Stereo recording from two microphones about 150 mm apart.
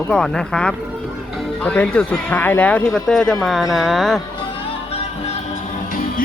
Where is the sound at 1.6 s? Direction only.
10° left (ahead or behind).